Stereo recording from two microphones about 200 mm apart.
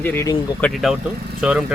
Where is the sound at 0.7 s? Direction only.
Centre (ahead or behind).